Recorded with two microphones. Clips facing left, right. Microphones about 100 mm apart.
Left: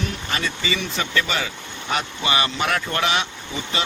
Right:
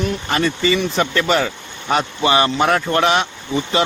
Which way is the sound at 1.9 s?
35° right (ahead or behind).